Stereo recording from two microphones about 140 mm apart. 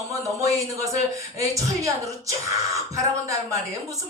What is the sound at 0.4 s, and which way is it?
Speech, 25° right (ahead or behind).